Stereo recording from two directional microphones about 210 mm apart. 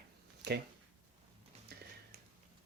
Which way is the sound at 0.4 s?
50° right (ahead or behind).